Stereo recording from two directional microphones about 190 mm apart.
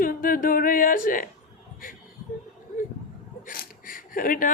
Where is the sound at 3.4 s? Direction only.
50° left (ahead or behind).